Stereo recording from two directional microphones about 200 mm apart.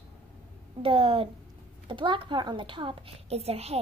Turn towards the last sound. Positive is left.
turn(degrees=-30)  # may be behind; listen again after turning